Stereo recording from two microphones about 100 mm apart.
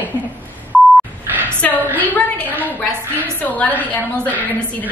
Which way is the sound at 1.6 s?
15° left (ahead or behind).